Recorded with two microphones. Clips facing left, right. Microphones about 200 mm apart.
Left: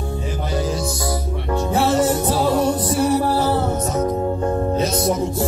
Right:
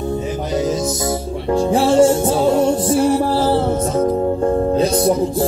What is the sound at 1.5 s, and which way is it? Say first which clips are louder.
Music: right 4 dB; 30° right (ahead or behind).